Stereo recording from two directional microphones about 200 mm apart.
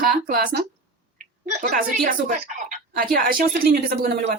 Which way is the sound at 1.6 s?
50° right (ahead or behind).